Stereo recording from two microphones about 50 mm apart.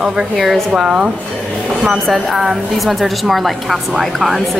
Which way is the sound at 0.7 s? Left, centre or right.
Right.